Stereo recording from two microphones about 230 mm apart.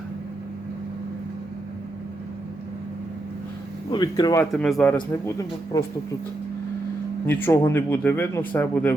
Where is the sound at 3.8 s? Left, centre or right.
Centre.